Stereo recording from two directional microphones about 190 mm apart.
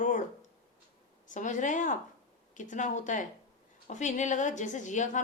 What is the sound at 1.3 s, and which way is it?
Speech, 40° left (ahead or behind).